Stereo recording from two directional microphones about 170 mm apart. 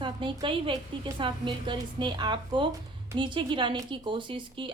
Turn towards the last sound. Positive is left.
turn(degrees=-30)  # may be behind; listen again after turning